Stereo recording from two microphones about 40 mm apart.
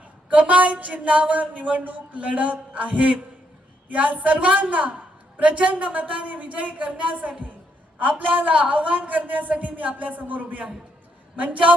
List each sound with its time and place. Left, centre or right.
0.3 s a woman's voice: right